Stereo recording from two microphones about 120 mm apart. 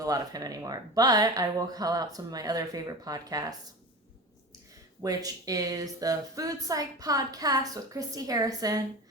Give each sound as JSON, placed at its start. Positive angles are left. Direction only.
{"t": 0.0, "sound": "a woman's voice", "side_deg": -30}
{"t": 5.0, "sound": "a woman's voice", "side_deg": -30}